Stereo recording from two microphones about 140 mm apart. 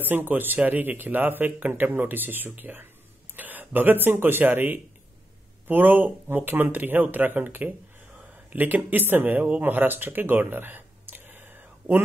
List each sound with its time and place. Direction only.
0.0 s a man's voice: 15° right (ahead or behind)